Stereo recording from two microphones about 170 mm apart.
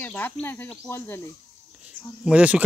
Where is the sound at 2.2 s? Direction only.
5° right (ahead or behind).